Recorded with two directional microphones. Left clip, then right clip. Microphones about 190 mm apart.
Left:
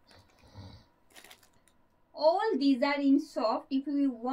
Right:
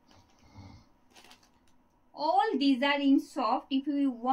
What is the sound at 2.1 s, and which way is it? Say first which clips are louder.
A woman's voice: left 1 dB; 15° right (ahead or behind).